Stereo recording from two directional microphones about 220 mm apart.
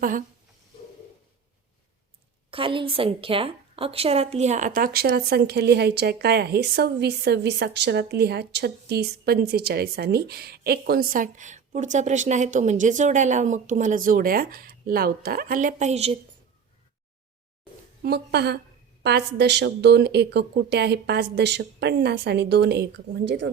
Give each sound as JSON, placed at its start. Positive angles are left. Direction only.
{"t": 0.0, "sound": "a woman's voice", "side_deg": -35}
{"t": 2.5, "sound": "a woman's voice", "side_deg": -25}
{"t": 18.0, "sound": "a woman's voice", "side_deg": -45}